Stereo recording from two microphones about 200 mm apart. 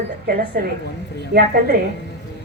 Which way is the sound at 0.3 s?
45° right (ahead or behind).